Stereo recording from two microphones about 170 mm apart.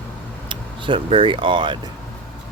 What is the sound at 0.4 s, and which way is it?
Speech, 30° right (ahead or behind).